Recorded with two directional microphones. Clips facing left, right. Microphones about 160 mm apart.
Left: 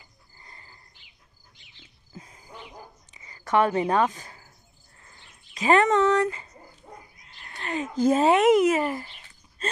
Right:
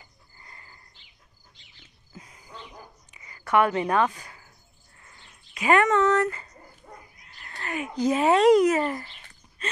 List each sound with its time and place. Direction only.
0.4 s wild animals: 25° left (ahead or behind)
3.2 s a sound: 30° left (ahead or behind)
5.6 s speech: 30° left (ahead or behind)
7.2 s a sound: 20° left (ahead or behind)
7.9 s speech: 50° left (ahead or behind)
8.3 s speech: 20° left (ahead or behind)